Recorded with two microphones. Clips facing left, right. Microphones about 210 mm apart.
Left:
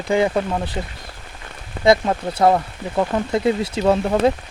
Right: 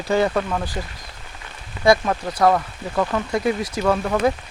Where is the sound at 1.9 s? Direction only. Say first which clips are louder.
Left 1 dB; 25° left (ahead or behind).